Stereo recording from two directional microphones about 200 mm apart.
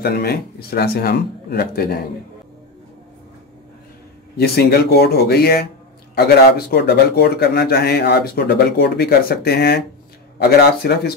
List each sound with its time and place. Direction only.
0.0 s speech: 50° left (ahead or behind)
4.4 s speech: 50° left (ahead or behind)